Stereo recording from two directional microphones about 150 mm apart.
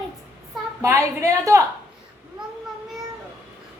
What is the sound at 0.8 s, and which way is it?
Speech, 20° right (ahead or behind).